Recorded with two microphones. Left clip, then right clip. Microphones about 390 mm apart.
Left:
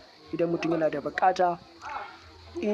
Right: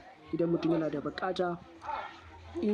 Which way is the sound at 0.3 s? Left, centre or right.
Centre.